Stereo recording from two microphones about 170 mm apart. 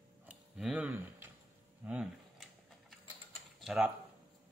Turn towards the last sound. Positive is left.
turn(degrees=-5)  # may be behind; listen again after turning